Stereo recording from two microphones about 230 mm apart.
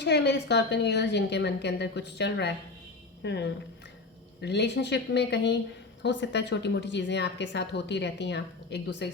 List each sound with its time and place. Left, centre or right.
0.0 s speech: left